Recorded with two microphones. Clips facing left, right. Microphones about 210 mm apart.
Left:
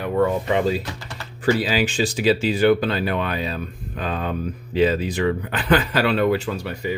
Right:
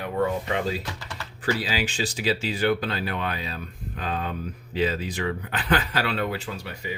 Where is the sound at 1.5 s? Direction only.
55° left (ahead or behind).